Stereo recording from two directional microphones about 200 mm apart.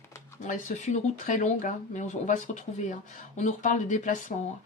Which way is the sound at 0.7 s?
40° left (ahead or behind).